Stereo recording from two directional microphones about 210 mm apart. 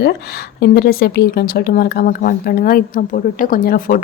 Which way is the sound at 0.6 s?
45° left (ahead or behind).